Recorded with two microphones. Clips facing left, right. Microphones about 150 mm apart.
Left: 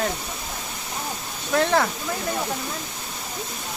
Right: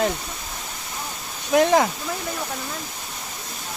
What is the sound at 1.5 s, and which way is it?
Speech, 15° right (ahead or behind).